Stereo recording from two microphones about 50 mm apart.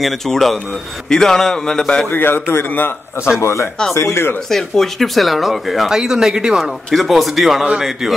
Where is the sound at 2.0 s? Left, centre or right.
Left.